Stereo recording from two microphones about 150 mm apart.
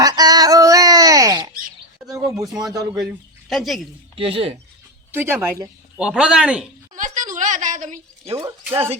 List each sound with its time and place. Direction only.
0.0 s a sound: 25° right (ahead or behind)
2.7 s speech: 25° right (ahead or behind)
3.5 s speech: centre (ahead or behind)
4.1 s speech: 40° right (ahead or behind)
5.1 s speech: 15° right (ahead or behind)
6.9 s a sound: 60° right (ahead or behind)
8.4 s speech: 20° right (ahead or behind)